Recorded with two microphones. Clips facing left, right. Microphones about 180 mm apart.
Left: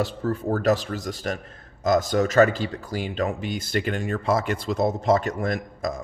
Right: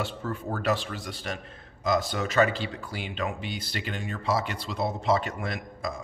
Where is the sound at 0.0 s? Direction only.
40° left (ahead or behind).